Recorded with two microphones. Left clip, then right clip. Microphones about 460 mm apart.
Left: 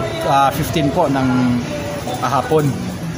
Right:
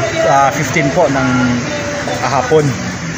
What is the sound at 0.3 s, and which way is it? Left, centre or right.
Speech, left.